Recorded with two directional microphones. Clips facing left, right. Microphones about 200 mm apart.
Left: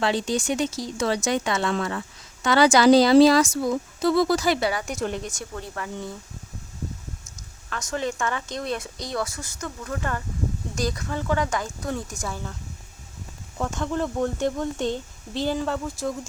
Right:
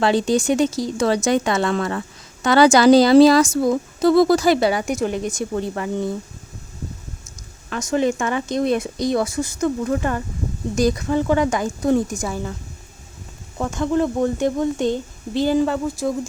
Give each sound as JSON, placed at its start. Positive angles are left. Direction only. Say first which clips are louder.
{"t": 0.0, "sound": "speech", "louder": "right 6 dB", "side_deg": -40}
{"t": 3.4, "sound": "speech", "louder": "right 6 dB", "side_deg": -65}
{"t": 4.0, "sound": "speech", "louder": "right 6 dB", "side_deg": -45}
{"t": 4.7, "sound": "speech", "louder": "right 7 dB", "side_deg": -20}
{"t": 5.0, "sound": "speech", "louder": "right 3 dB", "side_deg": -5}
{"t": 5.3, "sound": "speech", "louder": "right 11 dB", "side_deg": -20}
{"t": 7.7, "sound": "speech", "louder": "right 9 dB", "side_deg": -20}
{"t": 13.6, "sound": "speech", "louder": "right 7 dB", "side_deg": -5}